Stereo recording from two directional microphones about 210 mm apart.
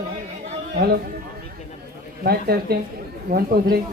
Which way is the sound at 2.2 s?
50° right (ahead or behind).